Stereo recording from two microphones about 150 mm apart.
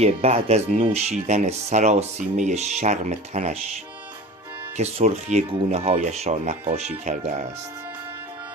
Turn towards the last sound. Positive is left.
turn(degrees=-55)  # may be behind; listen again after turning